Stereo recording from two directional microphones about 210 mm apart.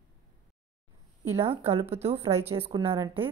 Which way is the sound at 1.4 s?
25° right (ahead or behind).